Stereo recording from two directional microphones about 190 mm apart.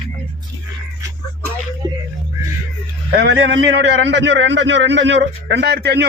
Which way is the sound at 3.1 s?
60° right (ahead or behind).